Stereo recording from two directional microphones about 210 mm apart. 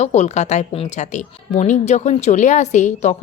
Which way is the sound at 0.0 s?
30° left (ahead or behind).